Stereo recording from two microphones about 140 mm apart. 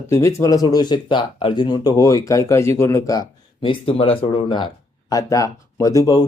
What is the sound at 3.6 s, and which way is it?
Speech, 40° left (ahead or behind).